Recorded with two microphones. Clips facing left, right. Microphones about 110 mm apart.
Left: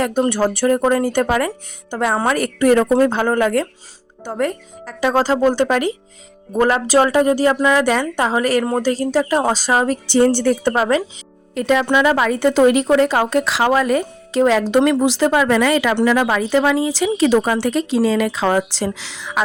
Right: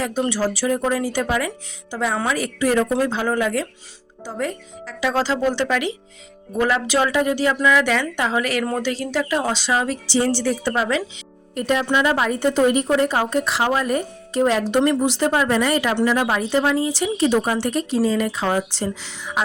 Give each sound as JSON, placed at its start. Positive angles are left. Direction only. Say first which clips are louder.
{"t": 0.0, "sound": "a woman's voice", "louder": "left 5 dB", "side_deg": 55}
{"t": 11.5, "sound": "a woman's voice", "louder": "left 4 dB", "side_deg": 90}